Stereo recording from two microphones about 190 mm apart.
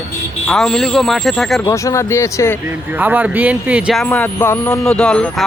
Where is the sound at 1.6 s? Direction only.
15° left (ahead or behind).